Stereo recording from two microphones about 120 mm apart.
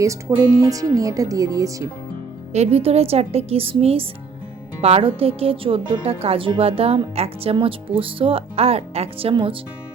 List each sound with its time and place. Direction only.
0.0 s speech: 25° right (ahead or behind)
2.5 s speech: 60° right (ahead or behind); by 9.6 s 45° right (ahead or behind)